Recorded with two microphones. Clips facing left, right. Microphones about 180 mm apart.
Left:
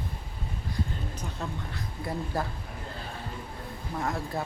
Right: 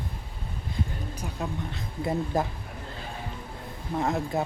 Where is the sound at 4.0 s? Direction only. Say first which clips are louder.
Right 5 dB; 20° right (ahead or behind).